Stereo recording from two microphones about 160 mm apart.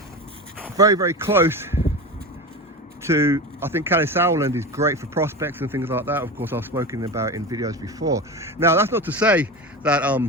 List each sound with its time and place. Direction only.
0.8 s speech: 20° right (ahead or behind)
3.0 s speech: 15° right (ahead or behind)